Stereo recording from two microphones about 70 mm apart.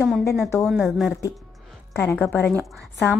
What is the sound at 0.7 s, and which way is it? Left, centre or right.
Speech, centre.